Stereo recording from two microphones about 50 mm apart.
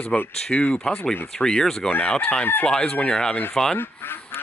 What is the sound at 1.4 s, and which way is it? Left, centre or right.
Speech, centre.